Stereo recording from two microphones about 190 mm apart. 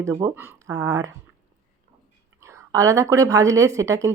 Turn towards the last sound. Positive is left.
turn(degrees=-15)  # may be behind; listen again after turning